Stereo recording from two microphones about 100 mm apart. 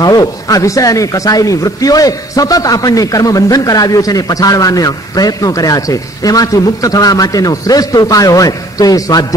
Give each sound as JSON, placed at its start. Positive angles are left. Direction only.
{"t": 0.0, "sound": "a man's voice", "side_deg": 40}